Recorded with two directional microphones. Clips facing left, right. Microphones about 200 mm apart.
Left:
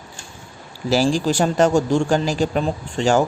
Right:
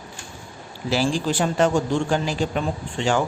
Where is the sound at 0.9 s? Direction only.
45° left (ahead or behind).